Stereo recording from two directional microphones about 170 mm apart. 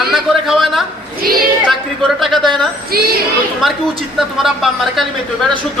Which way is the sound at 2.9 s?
65° right (ahead or behind).